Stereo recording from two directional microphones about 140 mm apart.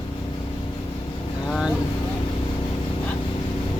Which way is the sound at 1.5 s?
5° right (ahead or behind).